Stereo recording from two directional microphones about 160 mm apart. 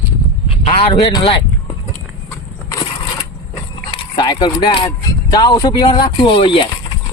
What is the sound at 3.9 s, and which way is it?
Speech, 30° left (ahead or behind).